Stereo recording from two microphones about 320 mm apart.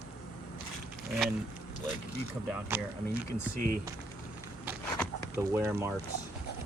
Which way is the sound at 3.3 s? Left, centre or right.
Right.